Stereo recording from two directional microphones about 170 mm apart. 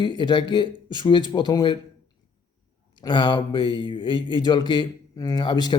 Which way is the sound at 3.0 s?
25° left (ahead or behind).